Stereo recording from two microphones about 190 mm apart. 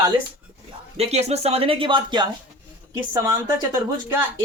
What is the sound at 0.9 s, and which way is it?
Speech, 35° right (ahead or behind).